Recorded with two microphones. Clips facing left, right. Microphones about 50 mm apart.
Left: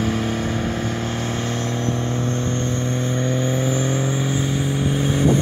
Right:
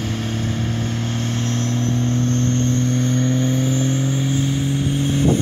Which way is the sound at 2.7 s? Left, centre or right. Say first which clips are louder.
Right 3 dB; right.